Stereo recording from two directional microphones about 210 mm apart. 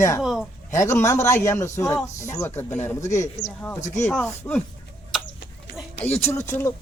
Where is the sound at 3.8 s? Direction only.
35° left (ahead or behind).